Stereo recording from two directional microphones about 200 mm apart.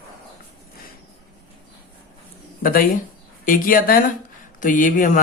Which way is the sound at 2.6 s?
45° left (ahead or behind).